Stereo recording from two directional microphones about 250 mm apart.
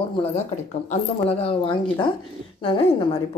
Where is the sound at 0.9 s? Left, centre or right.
Left.